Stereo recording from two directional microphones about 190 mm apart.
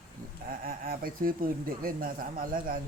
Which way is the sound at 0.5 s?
50° right (ahead or behind).